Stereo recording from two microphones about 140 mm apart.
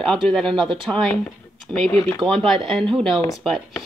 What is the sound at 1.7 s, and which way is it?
Speech, 30° right (ahead or behind).